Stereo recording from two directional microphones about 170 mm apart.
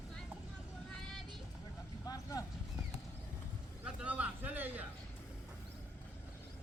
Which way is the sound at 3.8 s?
10° right (ahead or behind).